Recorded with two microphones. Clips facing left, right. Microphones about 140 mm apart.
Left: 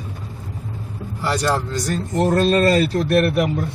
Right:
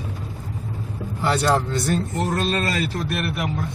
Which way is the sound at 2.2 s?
40° left (ahead or behind).